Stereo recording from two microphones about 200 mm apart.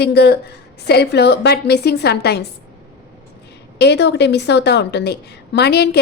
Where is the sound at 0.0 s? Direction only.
55° left (ahead or behind).